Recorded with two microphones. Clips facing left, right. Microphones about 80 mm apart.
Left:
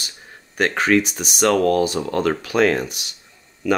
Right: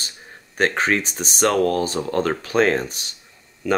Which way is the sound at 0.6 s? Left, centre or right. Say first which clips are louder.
Left 2 dB; right.